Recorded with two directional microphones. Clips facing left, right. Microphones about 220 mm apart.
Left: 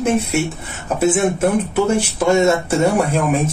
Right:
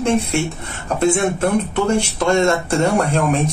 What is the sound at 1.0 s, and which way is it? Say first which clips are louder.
Speech: left 1 dB; 5° left (ahead or behind).